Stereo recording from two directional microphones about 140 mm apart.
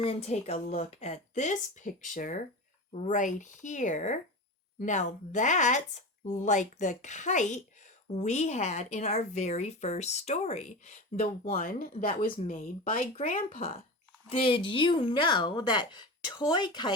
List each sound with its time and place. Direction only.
0.0 s speech: 45° left (ahead or behind)
11.4 s speech: 70° left (ahead or behind)
14.3 s speech: 40° left (ahead or behind)